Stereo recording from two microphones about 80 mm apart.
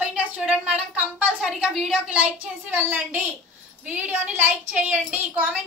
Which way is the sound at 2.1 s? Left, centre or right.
Centre.